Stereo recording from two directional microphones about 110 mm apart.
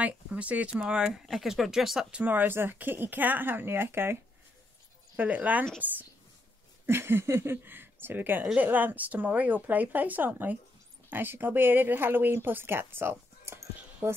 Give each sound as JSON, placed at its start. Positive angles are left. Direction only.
{"t": 0.0, "sound": "speech", "side_deg": -10}
{"t": 6.9, "sound": "speech", "side_deg": -20}